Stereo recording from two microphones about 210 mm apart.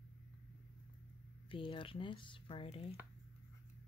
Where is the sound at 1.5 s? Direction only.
25° left (ahead or behind).